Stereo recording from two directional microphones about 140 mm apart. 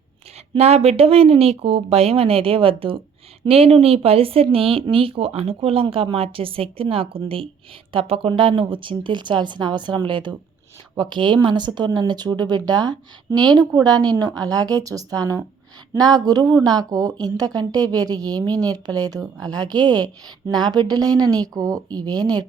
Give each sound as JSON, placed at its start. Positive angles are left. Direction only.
{"t": 0.5, "sound": "speech", "side_deg": -50}